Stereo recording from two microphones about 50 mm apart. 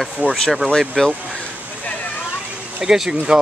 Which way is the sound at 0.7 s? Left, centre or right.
Centre.